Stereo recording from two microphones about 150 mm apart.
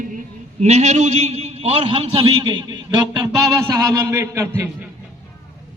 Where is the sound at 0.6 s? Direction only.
50° right (ahead or behind); by 4.6 s 20° right (ahead or behind).